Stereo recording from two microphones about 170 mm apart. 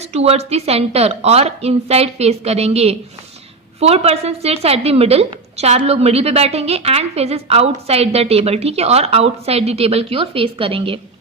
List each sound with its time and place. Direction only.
0.0 s a woman's voice: 40° right (ahead or behind)